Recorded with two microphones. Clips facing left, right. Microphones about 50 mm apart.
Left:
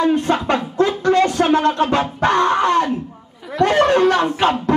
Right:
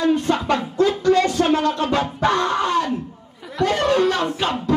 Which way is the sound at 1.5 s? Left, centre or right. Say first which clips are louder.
Left 3 dB; left.